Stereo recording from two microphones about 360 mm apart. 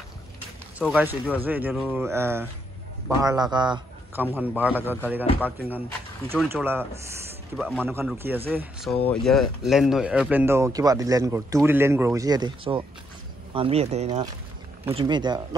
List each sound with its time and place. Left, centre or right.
0.7 s a man's voice: centre
6.2 s a man's voice: centre